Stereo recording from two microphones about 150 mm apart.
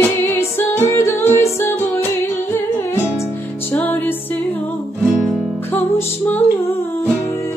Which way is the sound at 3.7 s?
10° left (ahead or behind).